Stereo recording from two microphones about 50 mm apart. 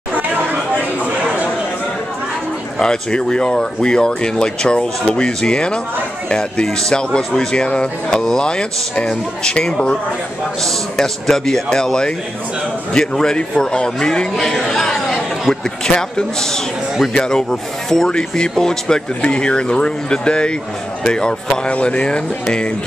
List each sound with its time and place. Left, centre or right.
2.8 s speech: centre
11.0 s speech: centre